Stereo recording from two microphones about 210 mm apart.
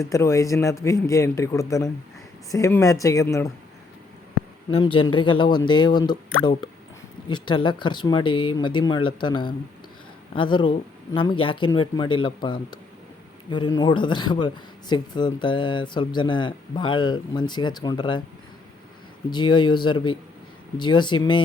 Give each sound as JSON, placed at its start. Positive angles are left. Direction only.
{"t": 0.1, "sound": "a man's voice", "side_deg": 15}
{"t": 4.7, "sound": "speech", "side_deg": 25}
{"t": 19.3, "sound": "speech", "side_deg": 20}